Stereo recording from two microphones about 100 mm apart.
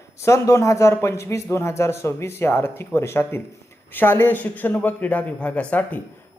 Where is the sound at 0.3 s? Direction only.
30° left (ahead or behind).